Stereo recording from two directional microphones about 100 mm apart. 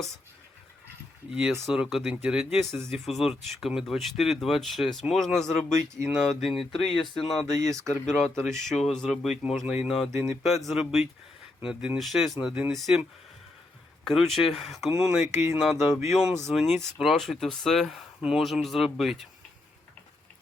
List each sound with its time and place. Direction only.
1.3 s speech: 5° right (ahead or behind)
6.9 s speech: 55° left (ahead or behind)
7.3 s speech: 5° left (ahead or behind)
14.0 s speech: centre (ahead or behind)